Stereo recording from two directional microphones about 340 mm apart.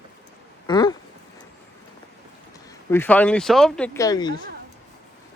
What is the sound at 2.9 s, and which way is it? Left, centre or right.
Speech, centre.